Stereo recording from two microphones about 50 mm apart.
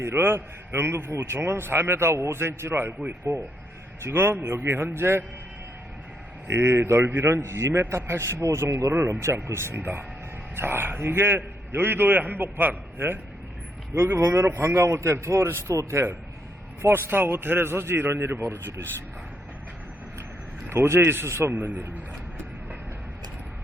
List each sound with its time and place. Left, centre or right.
0.0 s a man's voice: right
3.3 s a man's voice: right
4.0 s a man's voice: right
6.5 s a man's voice: right
9.0 s a man's voice: right
9.2 s a man's voice: right
14.0 s a man's voice: right
16.8 s a man's voice: right
20.7 s a man's voice: right
21.5 s a man's voice: right